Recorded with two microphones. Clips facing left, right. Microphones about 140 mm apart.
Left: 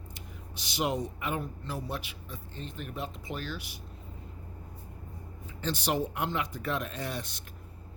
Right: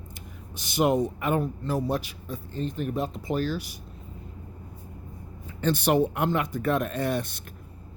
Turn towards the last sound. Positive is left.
turn(degrees=-55)  # may be behind; listen again after turning